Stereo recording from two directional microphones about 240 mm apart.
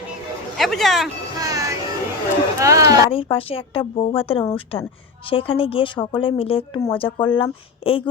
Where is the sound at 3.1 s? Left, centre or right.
Left.